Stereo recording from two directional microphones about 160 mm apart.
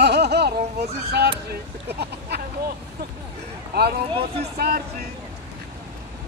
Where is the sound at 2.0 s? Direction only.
90° right.